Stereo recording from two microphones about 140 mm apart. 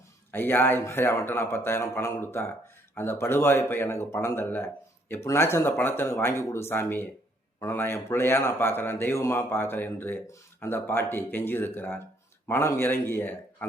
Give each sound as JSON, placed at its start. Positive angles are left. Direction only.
{"t": 0.3, "sound": "a man's voice", "side_deg": 15}